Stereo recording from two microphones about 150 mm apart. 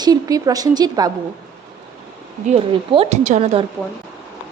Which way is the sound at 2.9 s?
40° right (ahead or behind).